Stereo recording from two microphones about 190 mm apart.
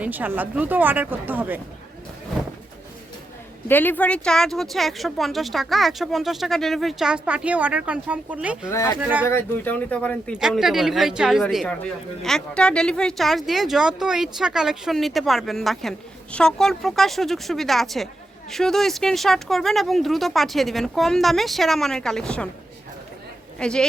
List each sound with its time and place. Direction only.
0.0 s speech: 10° right (ahead or behind)
3.7 s speech: 10° left (ahead or behind); by 8.7 s 5° right (ahead or behind)
8.7 s speech: 15° left (ahead or behind)
9.0 s speech: 10° right (ahead or behind)
9.2 s speech: 10° left (ahead or behind)
23.6 s speech: 5° left (ahead or behind)